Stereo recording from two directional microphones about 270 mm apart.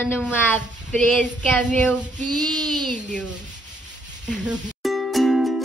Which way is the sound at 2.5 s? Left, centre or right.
Centre.